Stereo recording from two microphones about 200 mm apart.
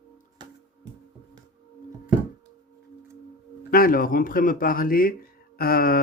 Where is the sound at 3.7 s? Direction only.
45° left (ahead or behind).